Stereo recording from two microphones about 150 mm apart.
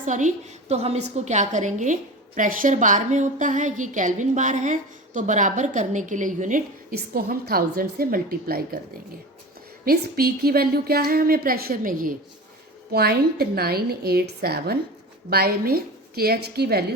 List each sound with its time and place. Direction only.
0.0 s a woman's voice: 55° right (ahead or behind); by 8.8 s 85° right
9.8 s speech: 90° right; by 12.1 s 65° right (ahead or behind)
12.9 s speech: 90° right